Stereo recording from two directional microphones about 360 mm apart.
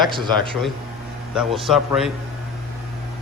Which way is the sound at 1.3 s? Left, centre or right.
Centre.